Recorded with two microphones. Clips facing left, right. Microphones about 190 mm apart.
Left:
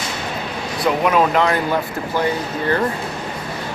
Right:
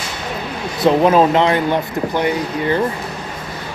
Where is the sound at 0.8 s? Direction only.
30° right (ahead or behind).